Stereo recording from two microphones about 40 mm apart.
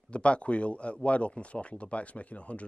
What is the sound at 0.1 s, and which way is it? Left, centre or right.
Speech, left.